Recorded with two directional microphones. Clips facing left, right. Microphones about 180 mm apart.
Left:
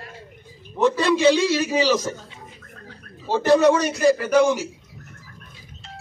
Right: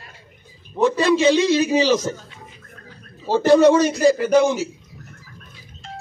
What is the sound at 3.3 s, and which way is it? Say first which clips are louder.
A man's voice: right 3 dB; 30° right (ahead or behind).